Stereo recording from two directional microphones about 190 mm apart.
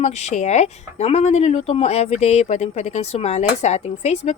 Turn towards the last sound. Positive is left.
turn(degrees=35)  # may be behind; listen again after turning